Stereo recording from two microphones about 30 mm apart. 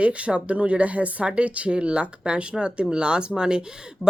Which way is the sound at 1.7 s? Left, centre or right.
Right.